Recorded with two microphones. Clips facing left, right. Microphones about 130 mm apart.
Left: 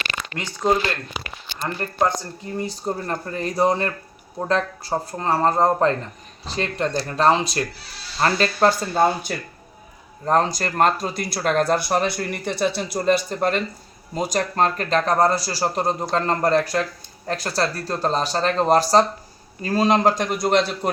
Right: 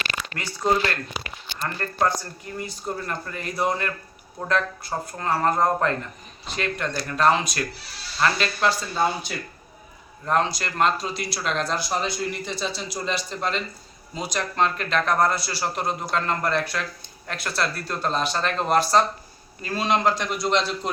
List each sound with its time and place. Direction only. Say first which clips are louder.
0.3 s speech: left 2 dB; 20° left (ahead or behind)
2.6 s a man's voice: left 5 dB; 35° left (ahead or behind); by 9.3 s 50° left (ahead or behind)
10.2 s a man's voice: left 4 dB; 40° left (ahead or behind); by 20.9 s 55° left (ahead or behind)